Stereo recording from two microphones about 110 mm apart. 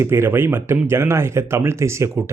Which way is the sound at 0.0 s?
20° right (ahead or behind).